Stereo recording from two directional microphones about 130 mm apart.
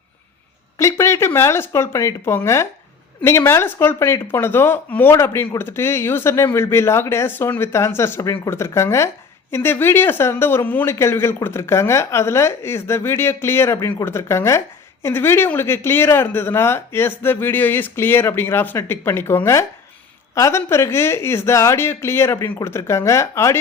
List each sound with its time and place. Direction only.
0.8 s speech: 20° left (ahead or behind)